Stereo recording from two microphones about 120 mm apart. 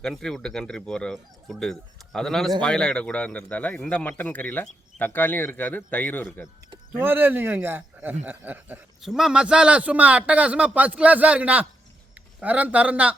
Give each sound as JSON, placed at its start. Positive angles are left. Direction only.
{"t": 0.0, "sound": "speech", "side_deg": 0}
{"t": 7.0, "sound": "a man's voice", "side_deg": -15}
{"t": 9.0, "sound": "a man's voice", "side_deg": -5}